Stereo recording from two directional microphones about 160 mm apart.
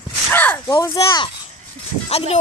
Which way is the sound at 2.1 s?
40° left (ahead or behind).